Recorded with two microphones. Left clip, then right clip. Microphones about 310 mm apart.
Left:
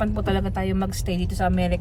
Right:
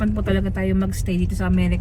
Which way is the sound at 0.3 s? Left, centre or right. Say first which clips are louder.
Right 1 dB; centre.